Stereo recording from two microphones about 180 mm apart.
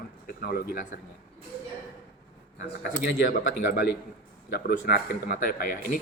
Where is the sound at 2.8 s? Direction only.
50° left (ahead or behind).